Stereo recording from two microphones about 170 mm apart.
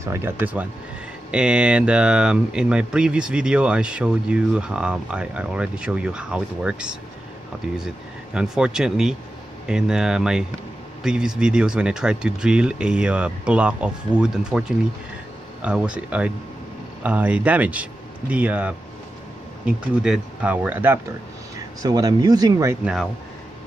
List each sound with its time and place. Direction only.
0.0 s speech: 15° right (ahead or behind)
8.4 s speech: 5° right (ahead or behind)